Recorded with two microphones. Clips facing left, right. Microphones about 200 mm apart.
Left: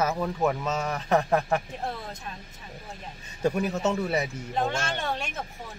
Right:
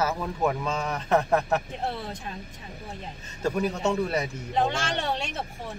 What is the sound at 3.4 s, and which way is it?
Speech, 5° left (ahead or behind).